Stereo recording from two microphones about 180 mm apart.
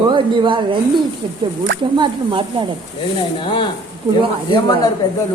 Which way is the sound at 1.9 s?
25° right (ahead or behind).